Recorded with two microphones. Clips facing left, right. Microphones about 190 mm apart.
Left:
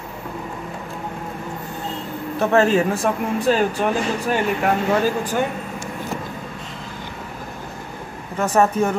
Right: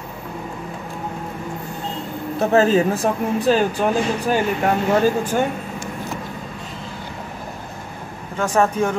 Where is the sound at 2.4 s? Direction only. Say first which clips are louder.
Right 1 dB; 35° right (ahead or behind).